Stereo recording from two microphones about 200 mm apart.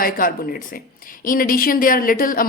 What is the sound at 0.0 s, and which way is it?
A woman's voice, 45° left (ahead or behind).